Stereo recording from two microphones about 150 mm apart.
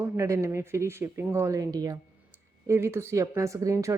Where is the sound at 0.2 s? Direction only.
20° right (ahead or behind).